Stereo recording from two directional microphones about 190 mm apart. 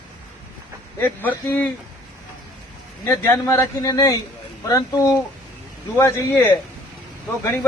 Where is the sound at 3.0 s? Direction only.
15° left (ahead or behind).